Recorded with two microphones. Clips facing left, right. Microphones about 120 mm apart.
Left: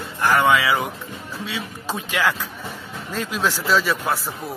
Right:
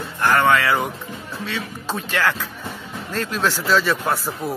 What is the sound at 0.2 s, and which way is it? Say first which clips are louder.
A man's voice: right 1 dB; 10° left (ahead or behind).